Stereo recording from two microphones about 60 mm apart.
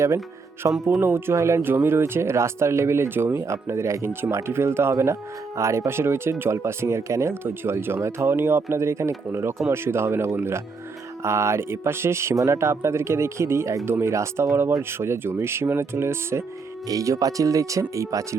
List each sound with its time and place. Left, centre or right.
0.6 s speech: right
1.0 s speech: right
1.4 s speech: right
1.6 s speech: right
7.4 s speech: right
16.9 s speech: right